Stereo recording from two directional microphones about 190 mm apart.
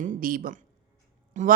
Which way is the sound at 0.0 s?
50° right (ahead or behind).